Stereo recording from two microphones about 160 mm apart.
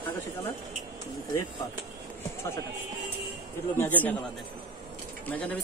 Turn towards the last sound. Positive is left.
turn(degrees=10)  # may be behind; listen again after turning